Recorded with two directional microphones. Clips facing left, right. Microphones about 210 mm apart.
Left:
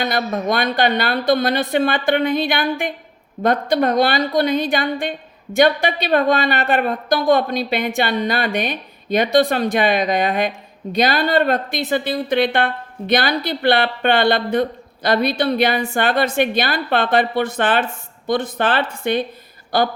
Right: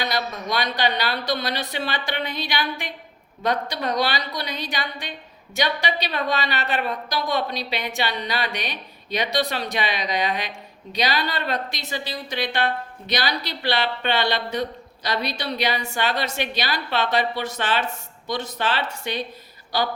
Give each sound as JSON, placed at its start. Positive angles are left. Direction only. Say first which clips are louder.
{"t": 0.0, "sound": "a woman's voice", "louder": "left 6 dB", "side_deg": 50}